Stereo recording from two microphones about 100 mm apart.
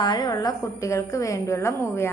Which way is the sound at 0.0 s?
45° left (ahead or behind).